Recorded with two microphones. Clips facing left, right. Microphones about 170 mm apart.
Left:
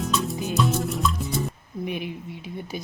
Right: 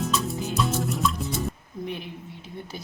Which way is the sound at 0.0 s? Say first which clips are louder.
Left 1 dB; centre (ahead or behind).